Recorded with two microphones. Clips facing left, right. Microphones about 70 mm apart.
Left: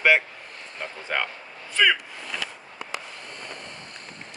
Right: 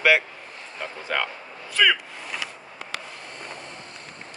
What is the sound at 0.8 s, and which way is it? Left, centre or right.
Speech, centre.